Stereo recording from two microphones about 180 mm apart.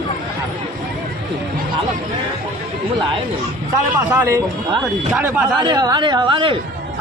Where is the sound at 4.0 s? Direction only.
15° right (ahead or behind).